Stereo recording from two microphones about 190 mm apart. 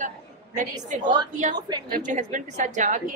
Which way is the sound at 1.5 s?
20° right (ahead or behind).